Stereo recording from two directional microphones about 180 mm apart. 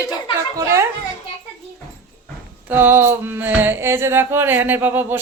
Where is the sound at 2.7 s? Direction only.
10° right (ahead or behind).